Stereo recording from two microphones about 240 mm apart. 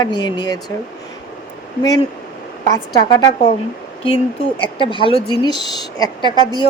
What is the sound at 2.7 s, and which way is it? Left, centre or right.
Speech, centre.